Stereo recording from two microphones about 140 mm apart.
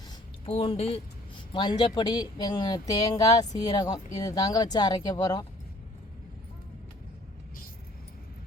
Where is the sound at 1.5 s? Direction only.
30° left (ahead or behind).